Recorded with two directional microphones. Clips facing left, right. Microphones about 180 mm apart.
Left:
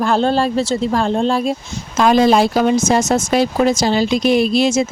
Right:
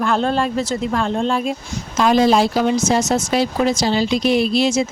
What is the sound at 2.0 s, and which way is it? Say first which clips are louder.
Speech: left 2 dB; 55° left (ahead or behind).